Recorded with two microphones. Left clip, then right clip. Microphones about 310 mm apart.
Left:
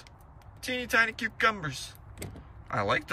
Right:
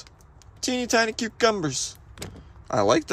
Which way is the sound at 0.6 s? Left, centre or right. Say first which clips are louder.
Right 3 dB; centre.